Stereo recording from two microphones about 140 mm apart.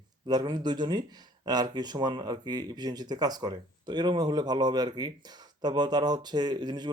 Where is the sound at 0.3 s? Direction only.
30° right (ahead or behind).